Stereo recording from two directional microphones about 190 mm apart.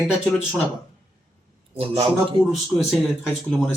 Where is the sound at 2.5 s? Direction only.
Centre (ahead or behind).